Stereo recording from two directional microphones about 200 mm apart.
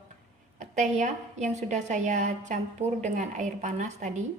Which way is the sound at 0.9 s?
35° right (ahead or behind).